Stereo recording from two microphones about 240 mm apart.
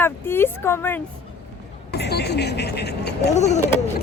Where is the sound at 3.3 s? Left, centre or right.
Left.